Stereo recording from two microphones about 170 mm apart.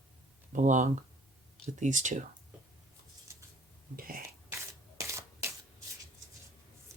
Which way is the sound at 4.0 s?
55° right (ahead or behind).